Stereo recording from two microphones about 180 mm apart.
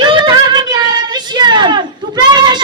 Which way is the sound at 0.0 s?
25° right (ahead or behind).